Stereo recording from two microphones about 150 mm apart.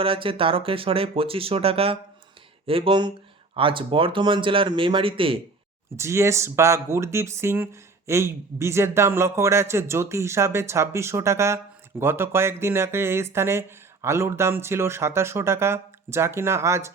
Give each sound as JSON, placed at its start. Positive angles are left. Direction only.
{"t": 0.0, "sound": "speech", "side_deg": -35}
{"t": 6.0, "sound": "speech", "side_deg": -20}